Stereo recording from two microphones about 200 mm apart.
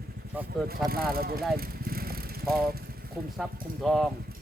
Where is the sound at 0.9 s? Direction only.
50° right (ahead or behind).